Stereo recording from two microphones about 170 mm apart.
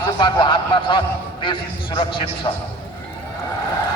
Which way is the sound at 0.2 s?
25° left (ahead or behind).